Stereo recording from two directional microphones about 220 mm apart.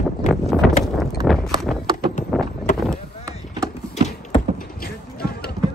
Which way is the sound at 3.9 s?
30° left (ahead or behind).